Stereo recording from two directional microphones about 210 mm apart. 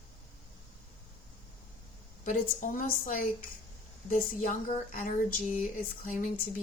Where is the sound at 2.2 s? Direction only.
40° left (ahead or behind).